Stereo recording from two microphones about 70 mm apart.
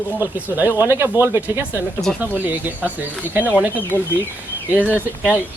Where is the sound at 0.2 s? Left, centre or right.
Right.